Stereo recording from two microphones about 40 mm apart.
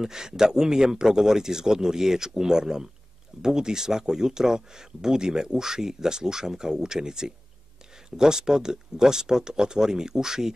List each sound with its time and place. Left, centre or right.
0.0 s speech: centre